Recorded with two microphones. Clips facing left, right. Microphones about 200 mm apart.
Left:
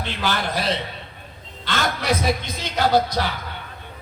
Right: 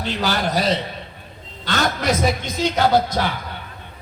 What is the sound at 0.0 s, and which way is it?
A man's voice, 40° right (ahead or behind).